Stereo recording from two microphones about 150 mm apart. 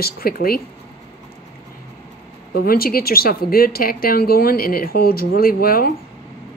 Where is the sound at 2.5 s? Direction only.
80° left.